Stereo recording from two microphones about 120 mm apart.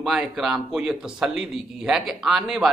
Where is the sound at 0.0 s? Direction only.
Centre (ahead or behind).